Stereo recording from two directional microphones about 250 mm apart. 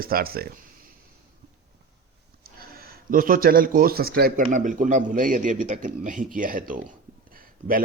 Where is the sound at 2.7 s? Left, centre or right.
Right.